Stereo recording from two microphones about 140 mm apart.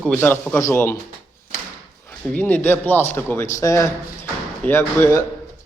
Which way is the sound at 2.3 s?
10° left (ahead or behind).